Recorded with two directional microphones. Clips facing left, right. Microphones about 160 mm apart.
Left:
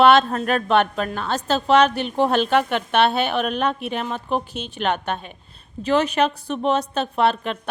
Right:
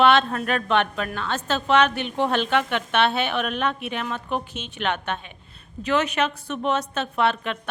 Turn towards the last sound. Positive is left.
turn(degrees=35)  # may be behind; listen again after turning